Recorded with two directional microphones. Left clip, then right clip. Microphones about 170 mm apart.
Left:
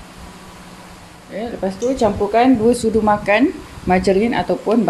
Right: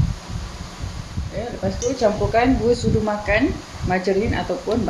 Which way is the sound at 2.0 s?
60° left (ahead or behind).